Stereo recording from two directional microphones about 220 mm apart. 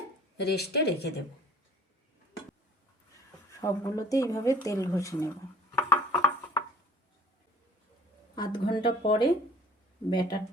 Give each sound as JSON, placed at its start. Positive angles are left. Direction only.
{"t": 0.4, "sound": "speech", "side_deg": 50}
{"t": 3.6, "sound": "speech", "side_deg": 15}
{"t": 5.7, "sound": "a sound", "side_deg": 15}
{"t": 8.4, "sound": "speech", "side_deg": 20}